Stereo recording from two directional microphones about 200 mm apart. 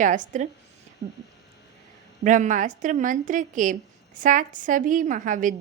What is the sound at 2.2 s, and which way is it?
A woman's voice, 40° right (ahead or behind).